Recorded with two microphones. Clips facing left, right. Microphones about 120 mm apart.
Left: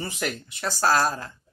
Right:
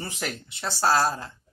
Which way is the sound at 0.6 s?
25° right (ahead or behind).